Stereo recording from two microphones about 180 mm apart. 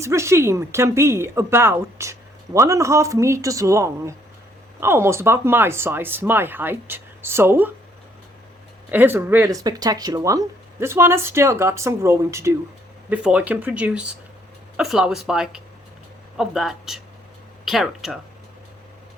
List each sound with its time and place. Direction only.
0.0 s speech: 15° right (ahead or behind)
8.9 s speech: 10° right (ahead or behind)